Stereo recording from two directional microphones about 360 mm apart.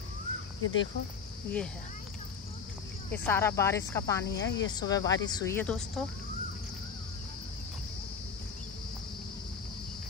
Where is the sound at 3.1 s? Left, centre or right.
Centre.